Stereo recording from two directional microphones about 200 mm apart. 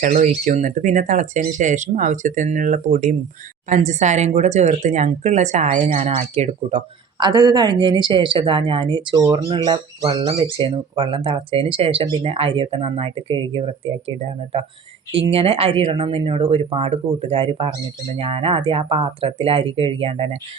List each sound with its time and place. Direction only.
0.0 s speech: 40° right (ahead or behind)
15.3 s speech: 30° right (ahead or behind)